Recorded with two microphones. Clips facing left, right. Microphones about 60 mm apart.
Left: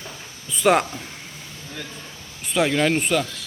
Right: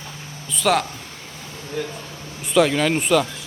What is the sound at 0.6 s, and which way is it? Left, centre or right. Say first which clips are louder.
Speech: left 2 dB; left.